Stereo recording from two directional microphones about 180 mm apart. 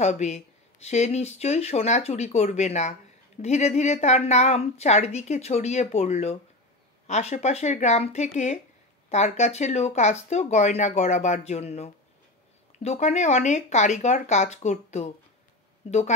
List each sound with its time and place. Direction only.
0.0 s speech: 40° left (ahead or behind)